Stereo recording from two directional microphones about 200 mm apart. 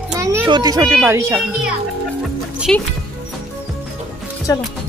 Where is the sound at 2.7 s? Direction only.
5° left (ahead or behind).